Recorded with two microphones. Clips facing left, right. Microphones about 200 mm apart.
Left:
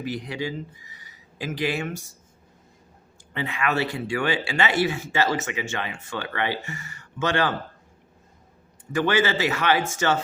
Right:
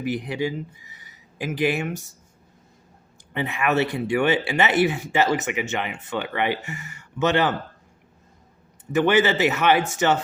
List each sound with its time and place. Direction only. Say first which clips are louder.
0.0 s speech: right 4 dB; 15° right (ahead or behind)
3.3 s speech: right 3 dB; 15° right (ahead or behind)
8.9 s speech: right 3 dB; 20° right (ahead or behind)